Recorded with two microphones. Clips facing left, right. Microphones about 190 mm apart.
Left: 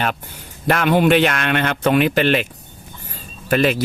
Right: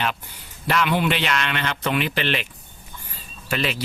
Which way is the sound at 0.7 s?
50° left (ahead or behind).